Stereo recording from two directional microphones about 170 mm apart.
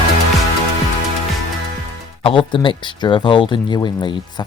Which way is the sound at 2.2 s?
30° left (ahead or behind).